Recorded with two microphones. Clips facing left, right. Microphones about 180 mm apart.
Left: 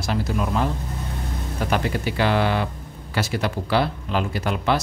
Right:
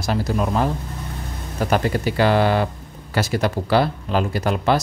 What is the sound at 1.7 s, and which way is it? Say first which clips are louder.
Speech: right 4 dB; 40° right (ahead or behind).